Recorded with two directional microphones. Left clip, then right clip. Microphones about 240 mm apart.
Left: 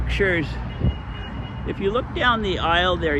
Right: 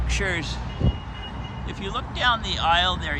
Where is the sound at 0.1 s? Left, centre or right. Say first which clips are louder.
Left 5 dB; centre.